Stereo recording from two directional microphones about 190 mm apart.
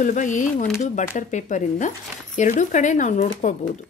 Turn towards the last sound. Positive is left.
turn(degrees=40)  # may be behind; listen again after turning